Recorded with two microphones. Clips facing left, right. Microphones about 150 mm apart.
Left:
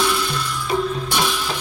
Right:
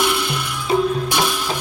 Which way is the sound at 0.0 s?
15° right (ahead or behind).